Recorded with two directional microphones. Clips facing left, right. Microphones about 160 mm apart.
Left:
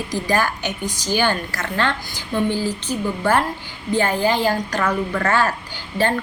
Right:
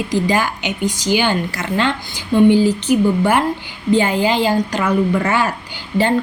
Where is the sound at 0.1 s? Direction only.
20° right (ahead or behind).